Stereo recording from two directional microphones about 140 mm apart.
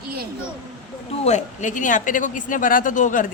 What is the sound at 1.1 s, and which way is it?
Speech, 50° left (ahead or behind).